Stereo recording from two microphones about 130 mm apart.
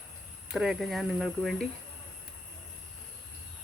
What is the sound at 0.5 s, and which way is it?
Speech, 5° right (ahead or behind).